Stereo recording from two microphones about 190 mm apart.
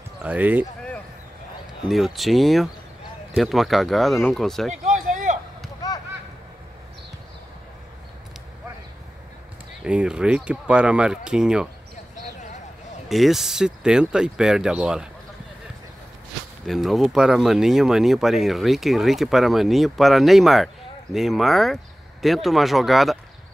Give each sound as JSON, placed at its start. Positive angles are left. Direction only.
{"t": 0.2, "sound": "speech", "side_deg": -10}
{"t": 1.9, "sound": "speech", "side_deg": 0}
{"t": 4.8, "sound": "a sound", "side_deg": -40}
{"t": 9.8, "sound": "speech", "side_deg": -5}
{"t": 13.1, "sound": "speech", "side_deg": 0}
{"t": 16.6, "sound": "speech", "side_deg": 0}